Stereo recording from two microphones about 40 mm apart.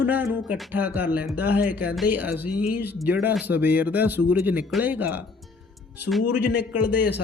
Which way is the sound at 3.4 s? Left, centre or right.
Right.